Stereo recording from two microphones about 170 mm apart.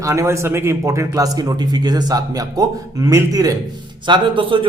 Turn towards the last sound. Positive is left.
turn(degrees=-30)  # may be behind; listen again after turning